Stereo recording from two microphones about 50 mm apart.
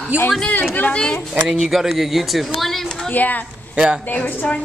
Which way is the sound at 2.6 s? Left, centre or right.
Centre.